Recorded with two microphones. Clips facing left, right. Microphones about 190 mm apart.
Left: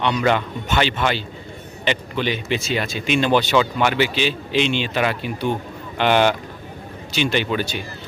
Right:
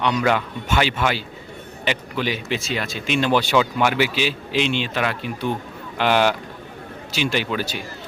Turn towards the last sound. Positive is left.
turn(degrees=-5)  # may be behind; listen again after turning